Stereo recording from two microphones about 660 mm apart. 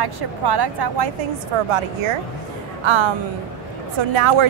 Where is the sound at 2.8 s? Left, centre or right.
Right.